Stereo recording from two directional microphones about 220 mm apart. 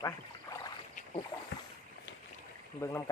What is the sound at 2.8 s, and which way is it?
Speech, 10° left (ahead or behind).